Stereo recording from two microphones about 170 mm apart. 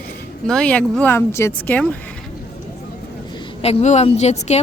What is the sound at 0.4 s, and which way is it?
Speech, 5° left (ahead or behind).